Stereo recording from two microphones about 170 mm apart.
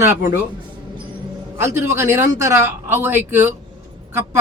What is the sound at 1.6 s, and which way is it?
Speech, 15° right (ahead or behind).